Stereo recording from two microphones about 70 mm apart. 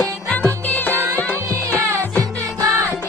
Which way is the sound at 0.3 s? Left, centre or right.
Left.